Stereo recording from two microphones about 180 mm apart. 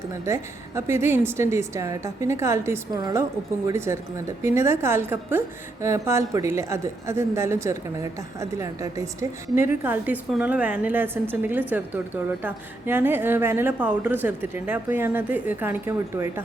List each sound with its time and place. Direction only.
0.3 s a woman's voice: 15° right (ahead or behind)